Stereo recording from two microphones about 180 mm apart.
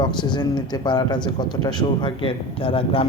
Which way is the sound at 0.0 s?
25° left (ahead or behind).